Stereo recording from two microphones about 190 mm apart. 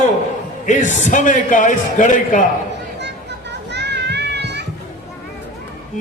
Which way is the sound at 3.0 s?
65° right (ahead or behind).